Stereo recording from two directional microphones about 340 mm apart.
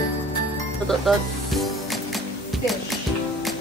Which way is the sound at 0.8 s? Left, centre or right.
Centre.